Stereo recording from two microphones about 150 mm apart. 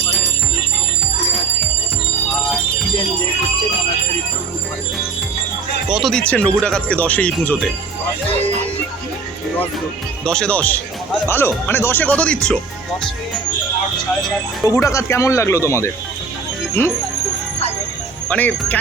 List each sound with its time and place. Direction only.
5.9 s speech: centre (ahead or behind)
10.2 s speech: 5° left (ahead or behind)
14.6 s speech: 20° left (ahead or behind)
18.3 s speech: 10° left (ahead or behind)